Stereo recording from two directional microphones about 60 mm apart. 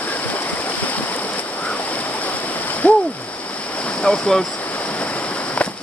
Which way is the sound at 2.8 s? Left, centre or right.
Left.